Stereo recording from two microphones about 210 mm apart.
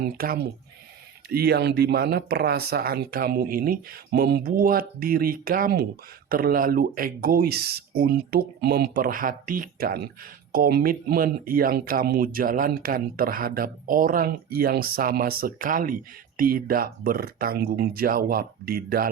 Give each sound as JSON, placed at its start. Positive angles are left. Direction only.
{"t": 0.0, "sound": "speech", "side_deg": -45}